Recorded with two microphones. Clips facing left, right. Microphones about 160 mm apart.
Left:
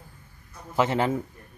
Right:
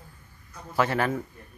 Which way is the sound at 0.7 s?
20° left (ahead or behind).